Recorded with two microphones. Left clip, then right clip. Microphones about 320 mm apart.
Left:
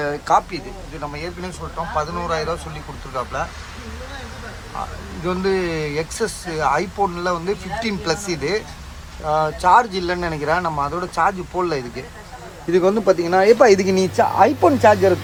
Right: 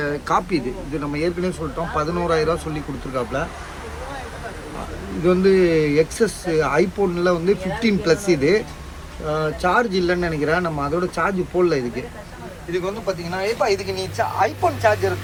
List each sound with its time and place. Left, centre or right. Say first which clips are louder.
0.0 s speech: left 3 dB; centre
5.2 s speech: right 5 dB; centre
12.7 s speech: left 9 dB; left